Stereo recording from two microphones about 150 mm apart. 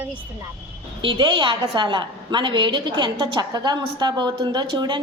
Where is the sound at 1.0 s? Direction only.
30° right (ahead or behind).